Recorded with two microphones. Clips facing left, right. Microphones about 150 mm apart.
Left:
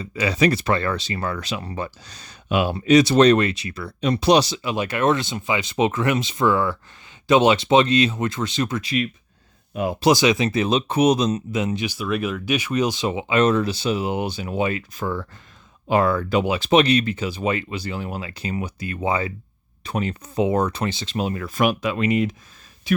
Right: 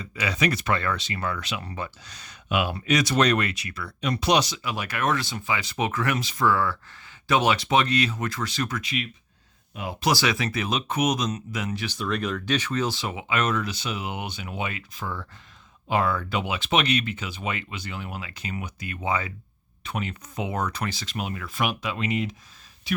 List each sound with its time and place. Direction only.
0.0 s speech: 30° left (ahead or behind)
10.0 s speech: 20° left (ahead or behind)
11.9 s speech: 5° left (ahead or behind); by 23.0 s 50° left (ahead or behind)